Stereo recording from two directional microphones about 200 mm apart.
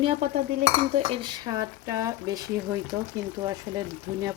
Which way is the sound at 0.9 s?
25° right (ahead or behind).